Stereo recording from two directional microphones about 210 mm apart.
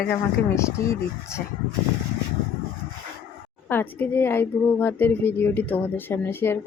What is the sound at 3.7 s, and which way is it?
A woman's voice, 10° left (ahead or behind).